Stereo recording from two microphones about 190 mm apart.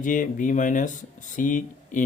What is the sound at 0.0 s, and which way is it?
Speech, 45° left (ahead or behind).